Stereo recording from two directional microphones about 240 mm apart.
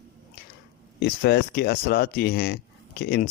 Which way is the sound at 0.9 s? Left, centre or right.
Left.